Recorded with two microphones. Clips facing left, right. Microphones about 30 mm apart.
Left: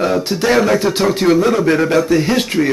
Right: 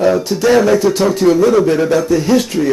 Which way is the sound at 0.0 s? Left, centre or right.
Left.